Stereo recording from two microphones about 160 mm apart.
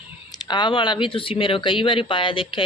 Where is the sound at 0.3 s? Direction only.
25° left (ahead or behind).